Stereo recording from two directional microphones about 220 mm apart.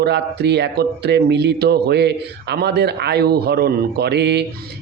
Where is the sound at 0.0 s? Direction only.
50° right (ahead or behind).